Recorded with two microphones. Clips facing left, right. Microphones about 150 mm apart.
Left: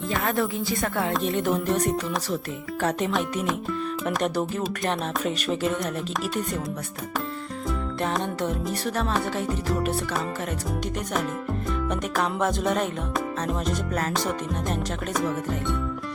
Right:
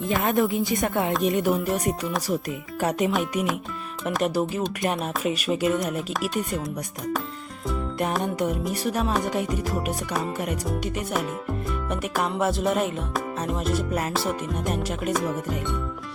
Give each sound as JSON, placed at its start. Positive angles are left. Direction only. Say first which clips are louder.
{"t": 0.2, "sound": "speech", "louder": "right 3 dB", "side_deg": -20}
{"t": 1.2, "sound": "music", "louder": "right 2 dB", "side_deg": -10}
{"t": 8.1, "sound": "music", "louder": "right 2 dB", "side_deg": -10}
{"t": 11.9, "sound": "music", "louder": "right 1 dB", "side_deg": -5}